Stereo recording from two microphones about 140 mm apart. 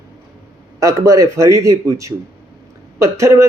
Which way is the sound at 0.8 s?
25° right (ahead or behind).